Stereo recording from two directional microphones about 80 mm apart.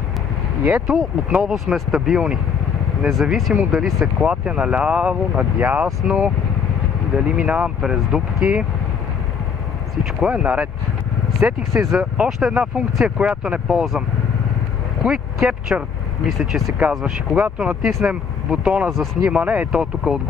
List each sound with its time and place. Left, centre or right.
0.7 s speech: centre
10.2 s speech: centre
11.3 s speech: right
12.0 s speech: centre
15.0 s speech: centre
16.3 s speech: centre